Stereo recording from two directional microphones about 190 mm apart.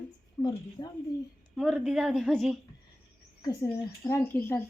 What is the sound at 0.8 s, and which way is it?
Speech, 25° left (ahead or behind).